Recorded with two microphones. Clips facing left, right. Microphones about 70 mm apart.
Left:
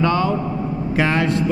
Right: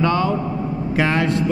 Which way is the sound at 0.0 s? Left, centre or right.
Centre.